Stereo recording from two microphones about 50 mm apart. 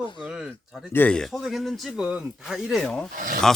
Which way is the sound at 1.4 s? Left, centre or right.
Centre.